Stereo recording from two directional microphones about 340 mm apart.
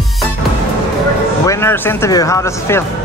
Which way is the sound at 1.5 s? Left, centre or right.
Centre.